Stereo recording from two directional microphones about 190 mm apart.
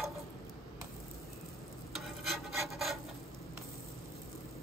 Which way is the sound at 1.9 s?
Centre (ahead or behind).